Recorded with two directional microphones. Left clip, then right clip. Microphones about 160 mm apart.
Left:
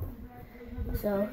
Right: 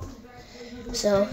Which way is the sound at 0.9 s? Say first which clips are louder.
Right 9 dB; 25° right (ahead or behind).